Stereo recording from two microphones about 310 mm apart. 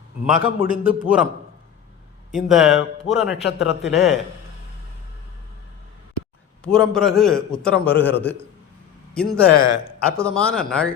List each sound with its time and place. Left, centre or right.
0.3 s a man's voice: centre
2.3 s a man's voice: centre
6.7 s a man's voice: centre
9.3 s a man's voice: left
10.2 s a man's voice: centre